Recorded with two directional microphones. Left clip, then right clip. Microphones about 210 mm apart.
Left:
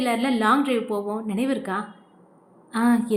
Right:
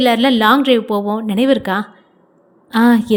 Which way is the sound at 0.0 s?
35° right (ahead or behind).